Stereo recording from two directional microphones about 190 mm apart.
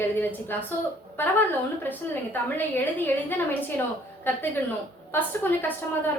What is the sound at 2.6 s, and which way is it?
Speech, 10° left (ahead or behind).